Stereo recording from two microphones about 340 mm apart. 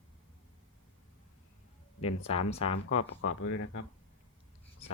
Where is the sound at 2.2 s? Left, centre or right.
Centre.